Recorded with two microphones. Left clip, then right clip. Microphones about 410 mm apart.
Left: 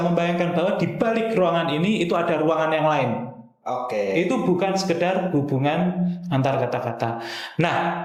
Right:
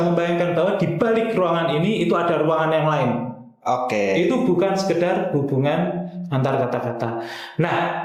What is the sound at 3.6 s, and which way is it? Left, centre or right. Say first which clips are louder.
Speech: right 5 dB; right.